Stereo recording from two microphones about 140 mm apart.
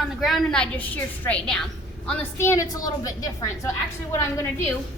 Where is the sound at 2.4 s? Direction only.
20° left (ahead or behind).